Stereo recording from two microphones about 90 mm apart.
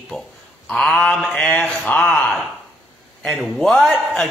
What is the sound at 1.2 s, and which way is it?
Speech, 15° left (ahead or behind).